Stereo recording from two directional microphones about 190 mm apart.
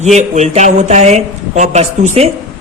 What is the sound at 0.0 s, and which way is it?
Speech, 35° right (ahead or behind).